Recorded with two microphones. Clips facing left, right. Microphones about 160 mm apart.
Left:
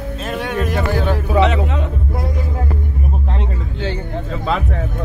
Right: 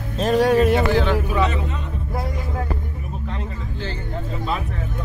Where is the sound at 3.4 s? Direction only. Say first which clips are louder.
Left 5 dB; 85° left.